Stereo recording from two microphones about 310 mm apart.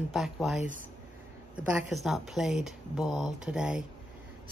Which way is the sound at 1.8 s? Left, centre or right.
Centre.